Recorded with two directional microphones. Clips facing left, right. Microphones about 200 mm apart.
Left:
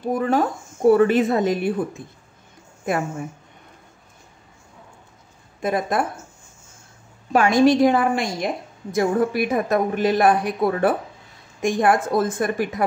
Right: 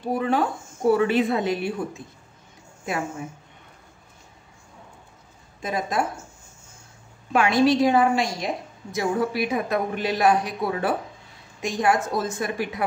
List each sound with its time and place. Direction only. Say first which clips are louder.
0.2 s a woman's voice: left 3 dB; 45° left (ahead or behind)
5.6 s a woman's voice: left 4 dB; 55° left (ahead or behind)
7.3 s a woman's voice: left 3 dB; 45° left (ahead or behind)